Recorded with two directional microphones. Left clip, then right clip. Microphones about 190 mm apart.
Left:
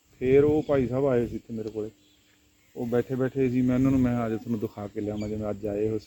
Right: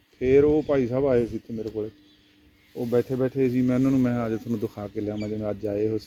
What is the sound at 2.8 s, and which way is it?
Speech, 30° left (ahead or behind).